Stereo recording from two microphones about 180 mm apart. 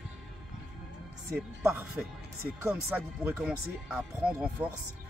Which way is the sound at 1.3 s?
5° right (ahead or behind).